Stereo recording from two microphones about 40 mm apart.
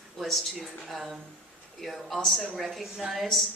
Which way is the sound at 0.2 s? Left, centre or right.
Centre.